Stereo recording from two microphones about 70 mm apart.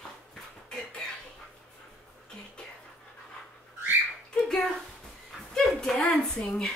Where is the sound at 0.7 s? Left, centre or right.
Centre.